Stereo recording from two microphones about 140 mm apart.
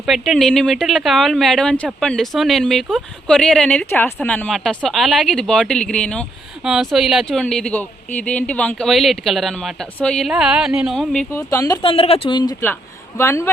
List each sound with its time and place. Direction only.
0.0 s speech: centre (ahead or behind)
4.4 s speech: centre (ahead or behind)
11.3 s speech: 20° left (ahead or behind)
11.8 s speech: 40° left (ahead or behind)
13.1 s speech: 20° left (ahead or behind)